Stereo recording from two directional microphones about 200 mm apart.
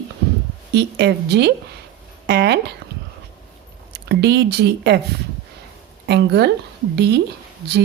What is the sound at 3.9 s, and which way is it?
Speech, 55° right (ahead or behind).